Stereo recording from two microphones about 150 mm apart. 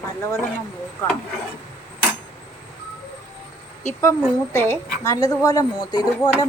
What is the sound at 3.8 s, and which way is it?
A woman's voice, 15° left (ahead or behind).